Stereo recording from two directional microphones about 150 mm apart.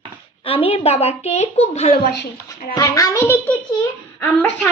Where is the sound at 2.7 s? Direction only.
20° left (ahead or behind).